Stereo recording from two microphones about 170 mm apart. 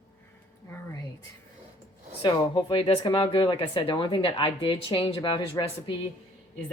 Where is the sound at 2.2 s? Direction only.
30° left (ahead or behind).